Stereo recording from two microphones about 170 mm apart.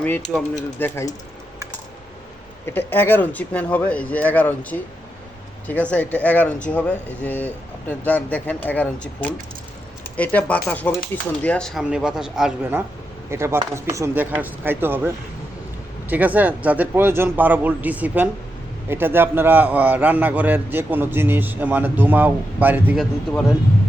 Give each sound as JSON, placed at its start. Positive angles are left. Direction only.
{"t": 0.0, "sound": "speech", "side_deg": 10}
{"t": 2.6, "sound": "speech", "side_deg": 15}
{"t": 13.3, "sound": "a man's voice", "side_deg": -15}